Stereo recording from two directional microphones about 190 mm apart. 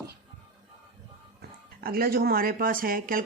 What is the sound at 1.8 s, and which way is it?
A woman's voice, 50° right (ahead or behind).